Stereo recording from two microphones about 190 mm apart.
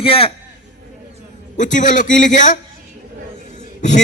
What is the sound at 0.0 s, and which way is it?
Speech, 30° left (ahead or behind).